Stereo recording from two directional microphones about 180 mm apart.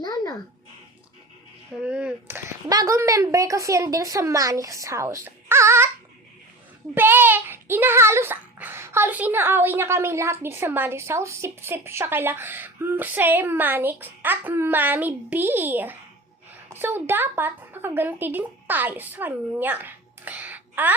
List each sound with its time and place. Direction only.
0.0 s a sound: 20° left (ahead or behind)
1.7 s speech: 5° right (ahead or behind)
6.9 s a woman's voice: 10° right (ahead or behind)